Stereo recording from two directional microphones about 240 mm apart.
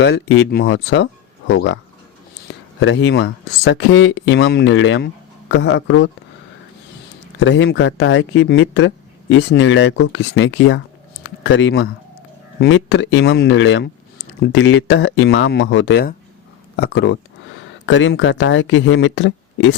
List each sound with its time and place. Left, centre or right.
0.0 s speech: left
2.8 s speech: left
7.3 s speech: left